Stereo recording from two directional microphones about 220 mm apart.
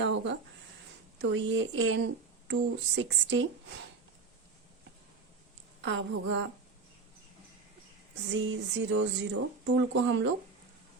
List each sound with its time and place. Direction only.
0.0 s a woman's voice: 55° right (ahead or behind)
5.8 s a woman's voice: 55° right (ahead or behind)
8.3 s speech: 55° right (ahead or behind)